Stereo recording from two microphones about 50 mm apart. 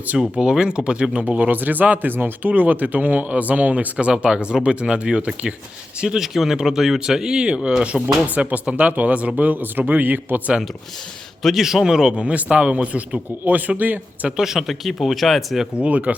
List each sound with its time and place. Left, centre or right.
0.2 s speech: centre; by 3.8 s right
3.9 s speech: centre
6.1 s speech: centre
8.4 s speech: right
11.4 s speech: centre
12.1 s speech: right
14.3 s speech: centre
15.8 s speech: right